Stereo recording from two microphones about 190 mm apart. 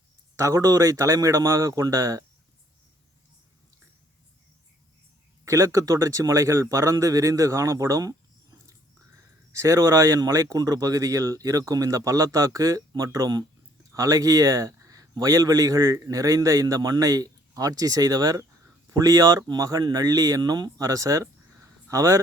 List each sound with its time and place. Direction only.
0.3 s a man's voice: 15° right (ahead or behind)
5.5 s a man's voice: 15° right (ahead or behind)
9.5 s a man's voice: 15° right (ahead or behind)